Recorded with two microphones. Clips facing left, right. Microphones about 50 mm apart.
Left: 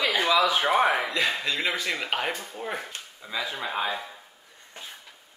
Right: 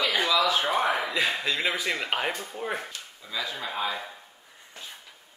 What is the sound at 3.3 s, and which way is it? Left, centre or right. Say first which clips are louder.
Speech: left 2 dB; left.